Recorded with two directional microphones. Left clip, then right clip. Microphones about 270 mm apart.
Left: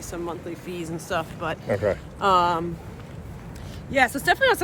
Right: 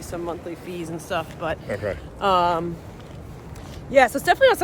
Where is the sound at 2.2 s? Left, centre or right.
Centre.